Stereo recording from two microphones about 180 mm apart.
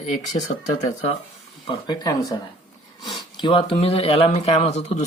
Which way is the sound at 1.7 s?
20° left (ahead or behind).